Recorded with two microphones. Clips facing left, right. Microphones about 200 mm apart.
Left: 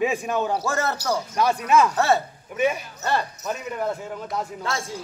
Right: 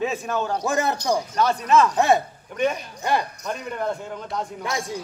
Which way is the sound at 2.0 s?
15° right (ahead or behind).